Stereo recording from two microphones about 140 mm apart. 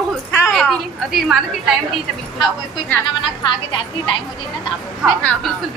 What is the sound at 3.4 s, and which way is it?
Speech, 35° left (ahead or behind).